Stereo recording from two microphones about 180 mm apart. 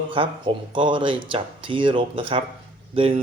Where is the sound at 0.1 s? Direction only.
25° right (ahead or behind).